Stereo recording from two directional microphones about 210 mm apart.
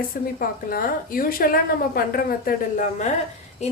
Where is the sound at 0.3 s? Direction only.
45° left (ahead or behind).